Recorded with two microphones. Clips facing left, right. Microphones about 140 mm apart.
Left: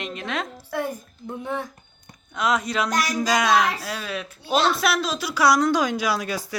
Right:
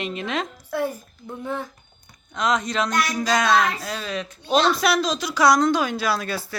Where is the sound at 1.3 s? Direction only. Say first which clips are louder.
Even; 15° left (ahead or behind).